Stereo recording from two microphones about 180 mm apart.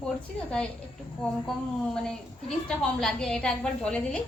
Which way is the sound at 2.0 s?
Centre (ahead or behind).